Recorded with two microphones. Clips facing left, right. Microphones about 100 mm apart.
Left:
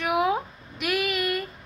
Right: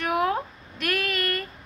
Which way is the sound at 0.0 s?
10° left (ahead or behind).